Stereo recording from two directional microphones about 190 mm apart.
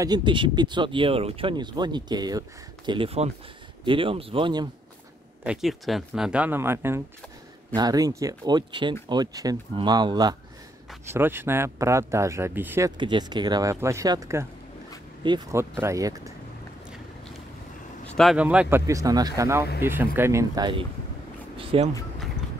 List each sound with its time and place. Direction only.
0.0 s speech: 25° right (ahead or behind)
5.4 s speech: 5° right (ahead or behind)
12.9 s speech: 25° right (ahead or behind)
18.1 s speech: centre (ahead or behind)
18.9 s speech: 15° right (ahead or behind)
21.5 s a sound: 30° right (ahead or behind)